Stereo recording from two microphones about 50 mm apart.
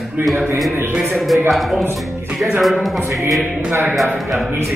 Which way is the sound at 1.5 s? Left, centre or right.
Centre.